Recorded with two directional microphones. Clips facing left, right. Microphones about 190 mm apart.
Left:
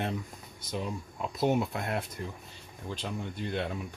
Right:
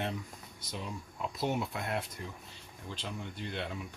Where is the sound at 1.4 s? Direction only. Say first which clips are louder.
Left 6 dB; 50° left (ahead or behind).